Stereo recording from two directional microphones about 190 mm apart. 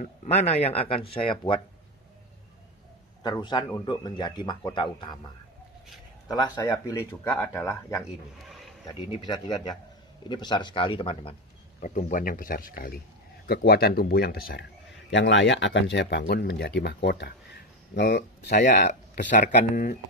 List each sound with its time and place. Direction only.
0.0 s speech: 35° left (ahead or behind)
3.2 s a man's voice: 25° left (ahead or behind)
6.2 s a man's voice: 20° left (ahead or behind)
8.5 s a sound: centre (ahead or behind)
8.8 s a man's voice: 20° left (ahead or behind)
11.8 s a man's voice: 45° left (ahead or behind)
18.7 s speech: 40° left (ahead or behind)